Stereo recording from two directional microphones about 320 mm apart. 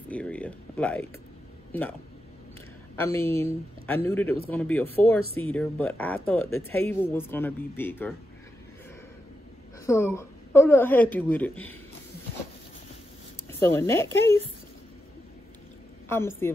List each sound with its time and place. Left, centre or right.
0.1 s a sound: centre
1.7 s speech: centre
3.0 s a man's voice: centre
9.8 s speech: centre
13.5 s a man's voice: centre
16.1 s a man's voice: centre